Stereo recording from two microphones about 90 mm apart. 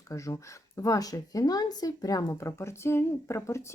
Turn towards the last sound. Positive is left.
turn(degrees=30)  # may be behind; listen again after turning